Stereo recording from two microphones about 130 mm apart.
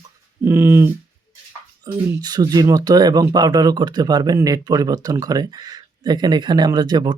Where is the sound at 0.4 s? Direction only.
20° right (ahead or behind).